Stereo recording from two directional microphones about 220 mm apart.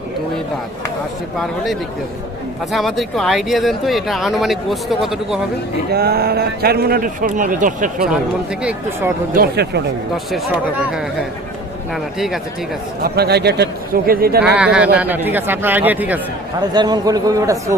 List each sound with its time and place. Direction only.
2.7 s speech: centre (ahead or behind)
5.9 s a man's voice: 45° right (ahead or behind)
8.6 s speech: 10° right (ahead or behind)
9.3 s a man's voice: 45° right (ahead or behind)
10.3 s speech: centre (ahead or behind)
13.0 s a man's voice: 45° right (ahead or behind)
14.4 s speech: 5° right (ahead or behind)
16.7 s speech: 20° right (ahead or behind)